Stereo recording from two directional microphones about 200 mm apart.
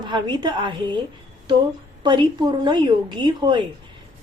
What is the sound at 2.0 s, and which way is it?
A woman's voice, 20° right (ahead or behind).